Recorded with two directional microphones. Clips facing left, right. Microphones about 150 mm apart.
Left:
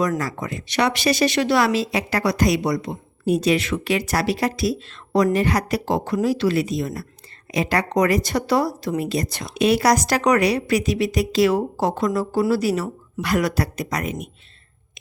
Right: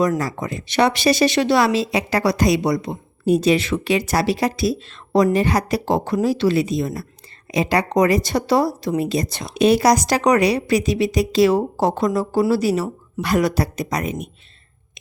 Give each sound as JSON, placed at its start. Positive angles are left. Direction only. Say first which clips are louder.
{"t": 0.2, "sound": "speech", "louder": "right 2 dB", "side_deg": -25}